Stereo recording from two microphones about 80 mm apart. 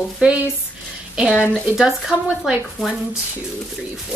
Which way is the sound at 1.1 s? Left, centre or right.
Centre.